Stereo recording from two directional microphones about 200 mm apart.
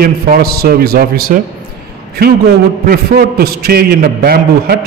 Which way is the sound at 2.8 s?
50° right (ahead or behind).